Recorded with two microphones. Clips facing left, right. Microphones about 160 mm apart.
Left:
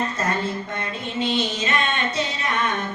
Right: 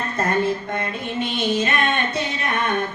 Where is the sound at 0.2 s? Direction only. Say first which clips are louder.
Right 4 dB; 55° right (ahead or behind).